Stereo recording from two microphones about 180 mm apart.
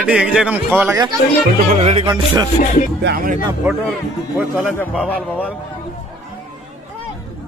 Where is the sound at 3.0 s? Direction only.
55° right (ahead or behind).